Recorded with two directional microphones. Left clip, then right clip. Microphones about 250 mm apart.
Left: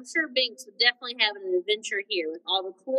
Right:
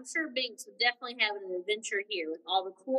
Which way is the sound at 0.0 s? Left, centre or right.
Centre.